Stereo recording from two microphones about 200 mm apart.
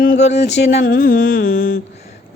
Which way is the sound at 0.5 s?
60° left (ahead or behind).